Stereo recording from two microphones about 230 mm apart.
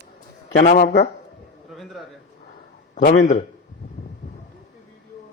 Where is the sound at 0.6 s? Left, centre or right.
Left.